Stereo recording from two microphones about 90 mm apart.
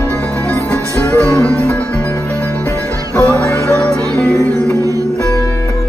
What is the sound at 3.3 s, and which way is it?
Music, 35° left (ahead or behind).